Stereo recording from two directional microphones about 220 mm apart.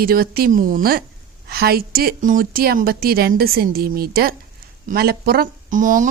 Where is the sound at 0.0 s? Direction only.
40° right (ahead or behind).